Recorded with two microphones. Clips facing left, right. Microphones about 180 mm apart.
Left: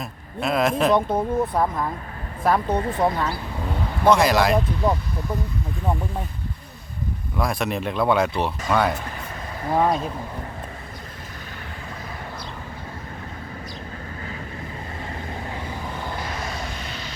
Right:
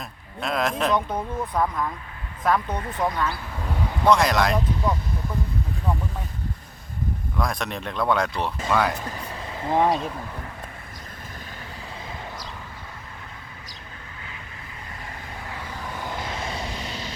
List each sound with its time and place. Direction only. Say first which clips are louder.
0.0 s speech: left 5 dB; 5° left (ahead or behind)
0.9 s speech: left 5 dB; 30° left (ahead or behind)
4.0 s speech: left 2 dB; centre (ahead or behind)
7.3 s speech: left 4 dB; 5° left (ahead or behind)
9.6 s speech: even; 20° right (ahead or behind)
16.0 s vehicle: right 2 dB; 25° right (ahead or behind)